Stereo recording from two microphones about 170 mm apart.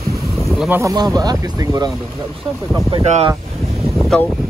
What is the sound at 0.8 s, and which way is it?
Speech, 20° right (ahead or behind).